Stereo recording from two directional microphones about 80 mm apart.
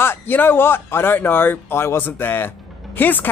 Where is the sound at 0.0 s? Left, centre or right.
Left.